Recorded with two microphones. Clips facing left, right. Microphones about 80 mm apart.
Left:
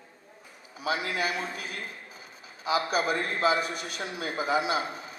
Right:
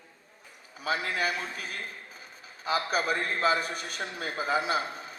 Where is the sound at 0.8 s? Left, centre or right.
Right.